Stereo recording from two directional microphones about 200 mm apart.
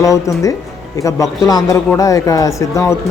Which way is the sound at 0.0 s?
15° left (ahead or behind).